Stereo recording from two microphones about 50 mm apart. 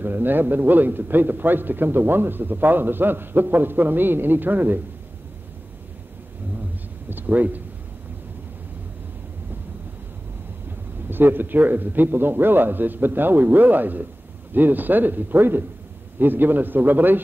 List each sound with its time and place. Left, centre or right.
0.0 s a man's voice: right
7.1 s speech: right
11.1 s a man's voice: right